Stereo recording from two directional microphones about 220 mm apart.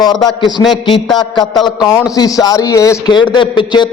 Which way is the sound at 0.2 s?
20° left (ahead or behind).